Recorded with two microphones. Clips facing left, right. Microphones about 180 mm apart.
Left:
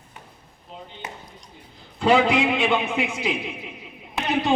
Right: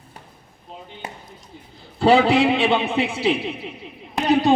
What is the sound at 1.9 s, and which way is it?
A man's voice, 35° right (ahead or behind).